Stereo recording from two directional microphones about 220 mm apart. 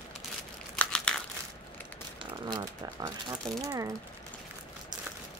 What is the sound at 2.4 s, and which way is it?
Speech, 20° right (ahead or behind).